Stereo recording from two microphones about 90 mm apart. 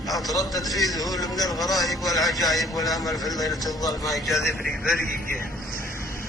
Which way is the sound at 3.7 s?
45° left (ahead or behind).